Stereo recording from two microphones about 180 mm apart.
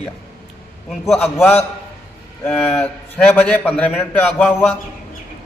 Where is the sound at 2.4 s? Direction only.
10° left (ahead or behind).